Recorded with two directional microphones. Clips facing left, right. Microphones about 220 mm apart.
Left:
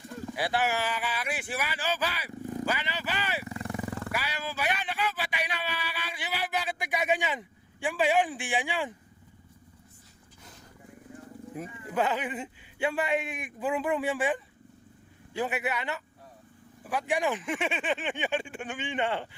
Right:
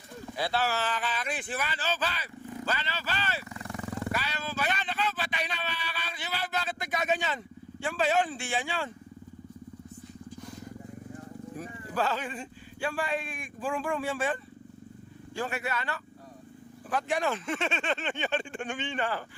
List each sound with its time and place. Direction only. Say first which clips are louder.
0.3 s speech: left 1 dB; 15° left (ahead or behind)
4.1 s a sound: even; 10° left (ahead or behind)
11.5 s a man's voice: left 3 dB; 20° left (ahead or behind)
18.9 s a man's voice: left 3 dB; 25° left (ahead or behind)